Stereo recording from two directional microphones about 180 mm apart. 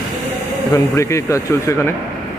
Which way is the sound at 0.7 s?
15° left (ahead or behind).